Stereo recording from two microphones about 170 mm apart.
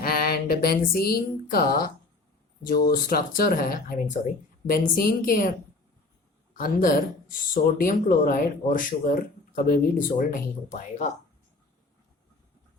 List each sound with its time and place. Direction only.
0.0 s speech: 60° left (ahead or behind)
10.7 s speech: 45° left (ahead or behind)